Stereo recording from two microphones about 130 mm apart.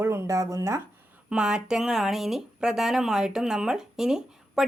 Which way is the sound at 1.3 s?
5° right (ahead or behind).